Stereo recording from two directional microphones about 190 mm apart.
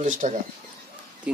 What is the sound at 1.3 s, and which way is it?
Speech, 5° right (ahead or behind).